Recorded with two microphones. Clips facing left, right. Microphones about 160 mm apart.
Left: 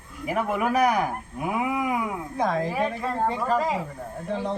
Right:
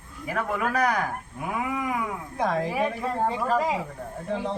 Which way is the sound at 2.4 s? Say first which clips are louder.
Even; centre (ahead or behind).